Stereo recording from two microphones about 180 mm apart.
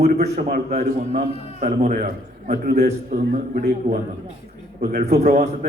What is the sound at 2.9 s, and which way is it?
Speech, 40° right (ahead or behind).